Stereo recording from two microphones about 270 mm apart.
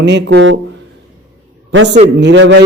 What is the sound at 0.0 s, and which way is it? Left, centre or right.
Speech, right.